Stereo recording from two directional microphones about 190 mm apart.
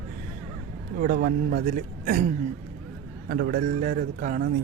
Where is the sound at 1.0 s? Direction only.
50° right (ahead or behind).